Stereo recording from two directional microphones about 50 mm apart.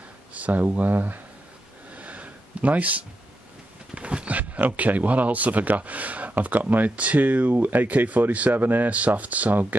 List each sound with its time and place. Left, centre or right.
0.3 s speech: right
2.0 s a sound: right
3.9 s speech: right